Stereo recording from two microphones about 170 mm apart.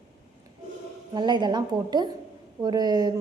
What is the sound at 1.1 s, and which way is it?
A woman's voice, 25° right (ahead or behind).